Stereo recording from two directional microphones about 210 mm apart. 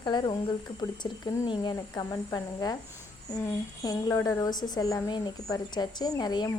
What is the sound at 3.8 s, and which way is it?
A woman's voice, 15° left (ahead or behind).